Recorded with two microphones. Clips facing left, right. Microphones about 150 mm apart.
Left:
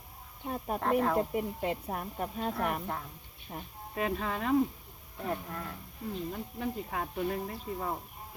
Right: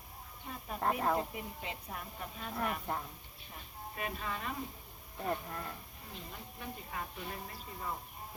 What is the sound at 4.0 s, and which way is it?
Speech, 75° left (ahead or behind).